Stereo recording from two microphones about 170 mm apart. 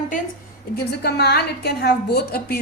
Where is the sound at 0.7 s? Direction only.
70° left (ahead or behind).